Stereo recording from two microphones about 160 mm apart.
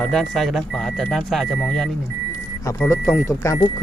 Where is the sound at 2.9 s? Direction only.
20° left (ahead or behind).